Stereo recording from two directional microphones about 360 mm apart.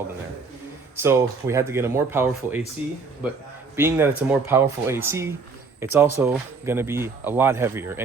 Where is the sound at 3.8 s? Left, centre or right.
Centre.